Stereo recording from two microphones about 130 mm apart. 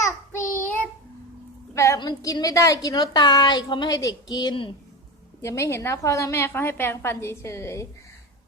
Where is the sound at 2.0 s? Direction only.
30° left (ahead or behind).